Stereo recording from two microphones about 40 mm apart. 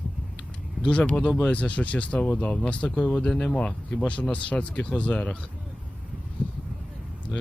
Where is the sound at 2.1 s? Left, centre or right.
Left.